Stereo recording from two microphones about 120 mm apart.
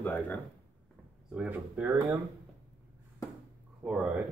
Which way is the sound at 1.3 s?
15° right (ahead or behind).